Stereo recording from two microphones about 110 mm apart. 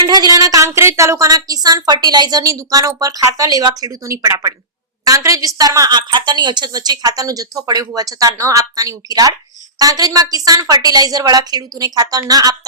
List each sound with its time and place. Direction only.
0.1 s a woman's voice: 35° right (ahead or behind)